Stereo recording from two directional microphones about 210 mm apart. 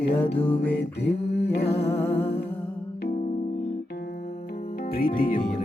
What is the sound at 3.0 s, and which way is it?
Music, 45° left (ahead or behind).